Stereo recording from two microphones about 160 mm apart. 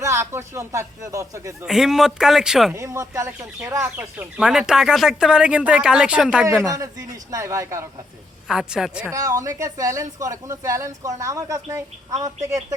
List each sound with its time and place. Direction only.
0.0 s speech: 20° right (ahead or behind)
1.6 s speech: 5° right (ahead or behind)
2.7 s speech: 20° right (ahead or behind)
6.7 s speech: 20° right (ahead or behind)
8.4 s speech: 5° right (ahead or behind)
9.0 s speech: 20° right (ahead or behind)